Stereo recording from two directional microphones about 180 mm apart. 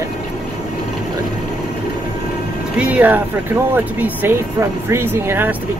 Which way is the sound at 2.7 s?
10° right (ahead or behind).